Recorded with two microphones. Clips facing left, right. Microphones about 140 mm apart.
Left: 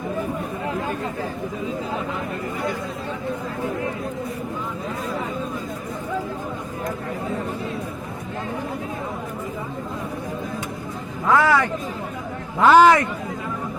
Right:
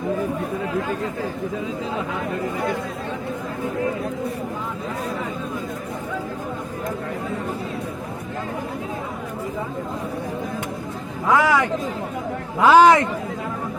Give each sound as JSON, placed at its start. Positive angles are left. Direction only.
{"t": 11.3, "sound": "a man's voice", "side_deg": -15}